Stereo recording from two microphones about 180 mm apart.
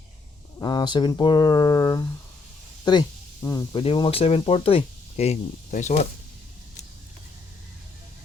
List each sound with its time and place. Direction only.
0.6 s speech: 25° left (ahead or behind); by 6.1 s 40° left (ahead or behind)